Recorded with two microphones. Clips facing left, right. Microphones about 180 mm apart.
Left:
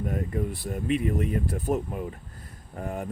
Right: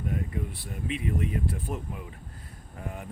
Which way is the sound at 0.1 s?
45° left (ahead or behind).